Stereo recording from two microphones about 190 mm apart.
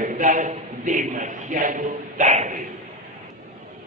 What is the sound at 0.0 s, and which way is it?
A man's voice, 40° right (ahead or behind).